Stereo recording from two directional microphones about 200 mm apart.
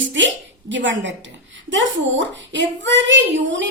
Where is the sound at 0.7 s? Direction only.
65° right (ahead or behind).